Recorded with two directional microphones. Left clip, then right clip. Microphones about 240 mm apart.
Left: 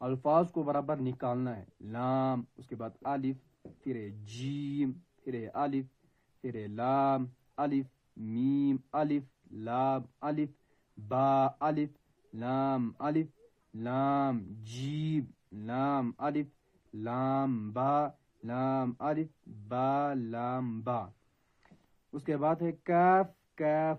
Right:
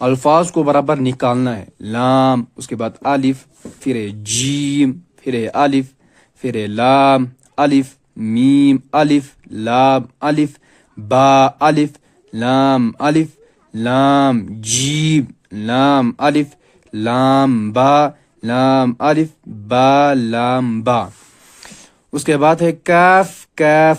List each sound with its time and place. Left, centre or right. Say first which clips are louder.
0.0 s mantra: right 16 dB; right
22.1 s mantra: right 18 dB; right